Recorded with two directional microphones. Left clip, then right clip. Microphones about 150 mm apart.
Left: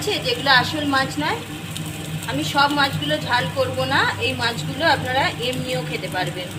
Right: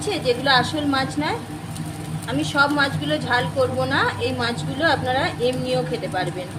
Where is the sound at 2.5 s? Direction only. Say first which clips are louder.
Left 1 dB; 55° right (ahead or behind).